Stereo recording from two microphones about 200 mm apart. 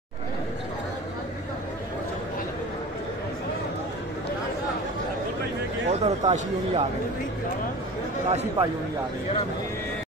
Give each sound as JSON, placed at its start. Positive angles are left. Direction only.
{"t": 5.9, "sound": "speech", "side_deg": -35}
{"t": 8.3, "sound": "a man's voice", "side_deg": -35}